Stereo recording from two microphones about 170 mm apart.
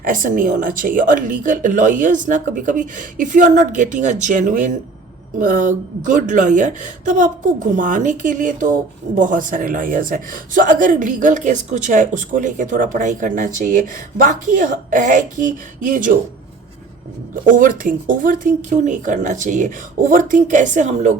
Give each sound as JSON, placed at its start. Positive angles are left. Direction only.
{"t": 0.0, "sound": "a woman's voice", "side_deg": -55}
{"t": 17.4, "sound": "a woman's voice", "side_deg": -55}